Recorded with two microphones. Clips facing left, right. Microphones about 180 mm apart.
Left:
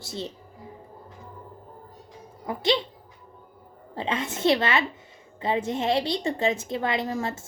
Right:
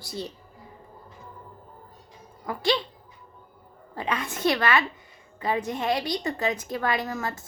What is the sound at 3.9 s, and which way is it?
A woman's voice, 25° left (ahead or behind).